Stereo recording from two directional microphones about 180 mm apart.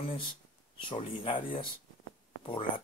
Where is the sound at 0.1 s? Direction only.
30° left (ahead or behind).